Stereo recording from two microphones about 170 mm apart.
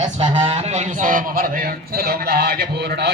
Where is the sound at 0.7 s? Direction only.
50° right (ahead or behind).